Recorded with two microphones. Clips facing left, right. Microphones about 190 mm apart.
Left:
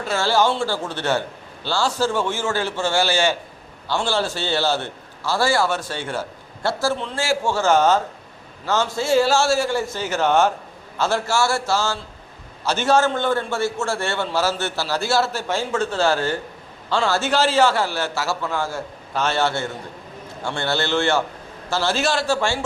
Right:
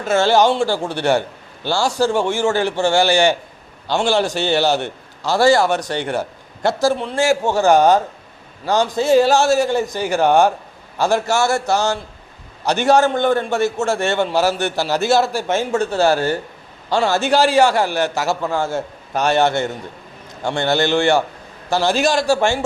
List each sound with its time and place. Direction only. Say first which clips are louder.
0.2 s a man's voice: right 5 dB; 20° right (ahead or behind)